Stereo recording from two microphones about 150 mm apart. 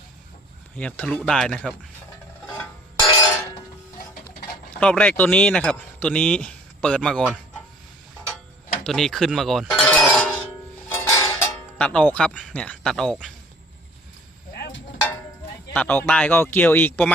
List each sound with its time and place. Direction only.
0.8 s speech: 5° left (ahead or behind)
4.8 s a man's voice: 10° left (ahead or behind)
8.8 s music: 5° left (ahead or behind)
10.9 s a sound: 20° left (ahead or behind)
11.8 s speech: 5° left (ahead or behind)
12.3 s speech: 5° right (ahead or behind)
12.5 s speech: 5° left (ahead or behind)
15.7 s a man's voice: 10° left (ahead or behind)